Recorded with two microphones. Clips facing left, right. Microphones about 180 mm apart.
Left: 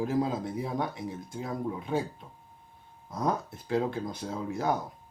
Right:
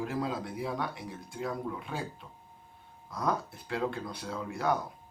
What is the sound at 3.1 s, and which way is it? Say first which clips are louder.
Speech: left 2 dB; 25° left (ahead or behind).